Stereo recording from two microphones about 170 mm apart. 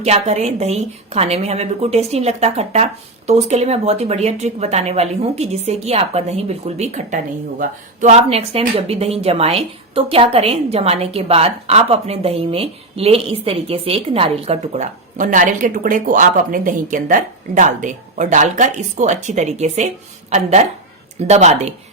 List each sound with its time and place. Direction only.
0.0 s a woman's voice: 40° right (ahead or behind)